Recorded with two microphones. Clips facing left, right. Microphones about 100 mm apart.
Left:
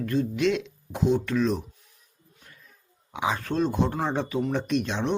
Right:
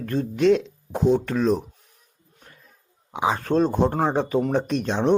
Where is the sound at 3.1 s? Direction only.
30° right (ahead or behind).